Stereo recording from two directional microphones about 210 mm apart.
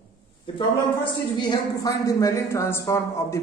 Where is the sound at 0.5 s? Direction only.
25° left (ahead or behind).